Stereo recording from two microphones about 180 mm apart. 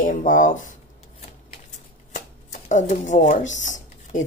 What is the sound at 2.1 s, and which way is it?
Shuffling cards, 40° left (ahead or behind).